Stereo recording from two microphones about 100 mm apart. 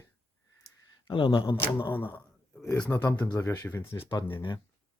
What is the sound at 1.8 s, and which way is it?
Speech, 20° left (ahead or behind).